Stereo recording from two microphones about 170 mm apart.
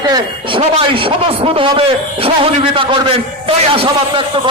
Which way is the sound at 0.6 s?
35° right (ahead or behind).